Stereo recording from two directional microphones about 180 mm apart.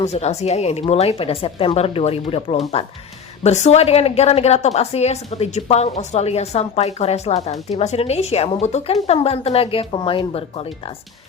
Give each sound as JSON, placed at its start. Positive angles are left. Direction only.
{"t": 0.0, "sound": "a woman's voice", "side_deg": 35}